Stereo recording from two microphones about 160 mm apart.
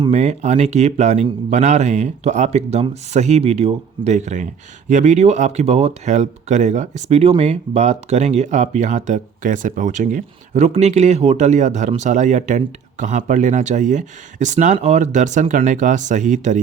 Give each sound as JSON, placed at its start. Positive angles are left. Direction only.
{"t": 0.0, "sound": "speech", "side_deg": -45}